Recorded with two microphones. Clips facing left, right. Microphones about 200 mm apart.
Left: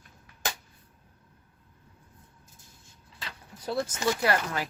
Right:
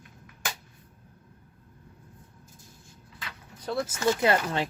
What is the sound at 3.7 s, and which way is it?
Speech, 5° right (ahead or behind).